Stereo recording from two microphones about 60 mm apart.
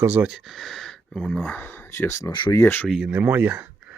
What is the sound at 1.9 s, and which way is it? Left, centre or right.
Speech, left.